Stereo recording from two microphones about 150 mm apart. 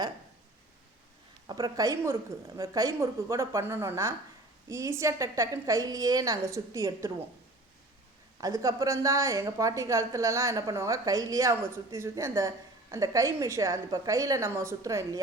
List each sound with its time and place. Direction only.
1.5 s a woman's voice: 25° right (ahead or behind)
8.4 s a woman's voice: 25° right (ahead or behind)